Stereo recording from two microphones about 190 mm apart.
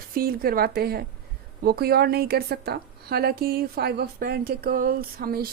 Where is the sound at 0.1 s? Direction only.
50° right (ahead or behind).